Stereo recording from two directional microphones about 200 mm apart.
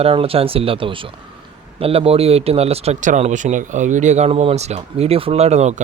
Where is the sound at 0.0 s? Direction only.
30° right (ahead or behind).